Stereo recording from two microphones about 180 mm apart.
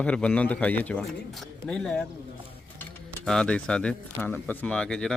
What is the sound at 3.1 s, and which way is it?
A man's voice, 5° left (ahead or behind).